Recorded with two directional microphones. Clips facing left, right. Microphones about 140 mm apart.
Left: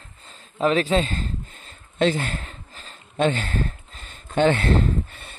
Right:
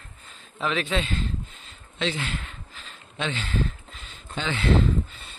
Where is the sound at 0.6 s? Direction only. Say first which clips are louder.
Left 7 dB; 40° left (ahead or behind).